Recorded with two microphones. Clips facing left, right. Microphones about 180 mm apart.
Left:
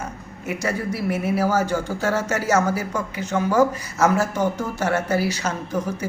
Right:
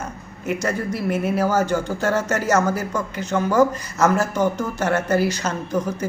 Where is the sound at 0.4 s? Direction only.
10° left (ahead or behind).